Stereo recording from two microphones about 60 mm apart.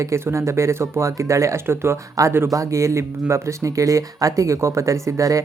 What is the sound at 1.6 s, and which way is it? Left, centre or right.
Speech, right.